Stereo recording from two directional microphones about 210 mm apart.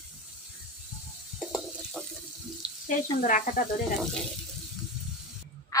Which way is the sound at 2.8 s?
40° left (ahead or behind).